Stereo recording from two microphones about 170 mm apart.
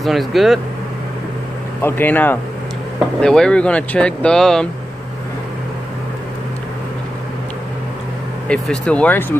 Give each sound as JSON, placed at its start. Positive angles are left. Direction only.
{"t": 0.0, "sound": "speech", "side_deg": 0}
{"t": 1.8, "sound": "speech", "side_deg": 10}
{"t": 8.5, "sound": "speech", "side_deg": 5}